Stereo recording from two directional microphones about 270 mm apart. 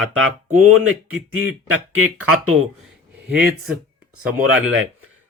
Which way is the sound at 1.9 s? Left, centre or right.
Right.